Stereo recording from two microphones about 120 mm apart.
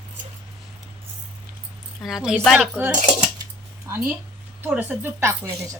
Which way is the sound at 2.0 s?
5° right (ahead or behind).